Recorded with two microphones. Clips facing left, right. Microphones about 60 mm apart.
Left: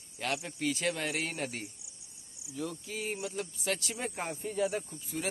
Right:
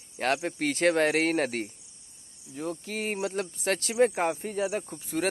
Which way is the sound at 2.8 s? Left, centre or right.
Right.